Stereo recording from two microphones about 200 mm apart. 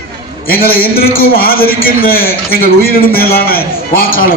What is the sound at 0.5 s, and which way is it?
A man's voice, 50° left (ahead or behind).